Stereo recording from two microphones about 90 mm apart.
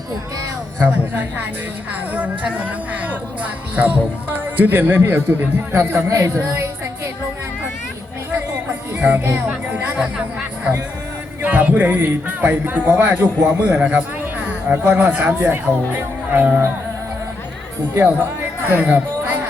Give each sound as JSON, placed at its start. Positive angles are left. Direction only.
{"t": 0.8, "sound": "a man's voice", "side_deg": -20}
{"t": 6.1, "sound": "speech", "side_deg": -35}
{"t": 6.5, "sound": "a sound", "side_deg": -30}
{"t": 9.1, "sound": "speech", "side_deg": -25}
{"t": 10.0, "sound": "chatter", "side_deg": -5}
{"t": 11.4, "sound": "a man's voice", "side_deg": -15}
{"t": 17.9, "sound": "music", "side_deg": -20}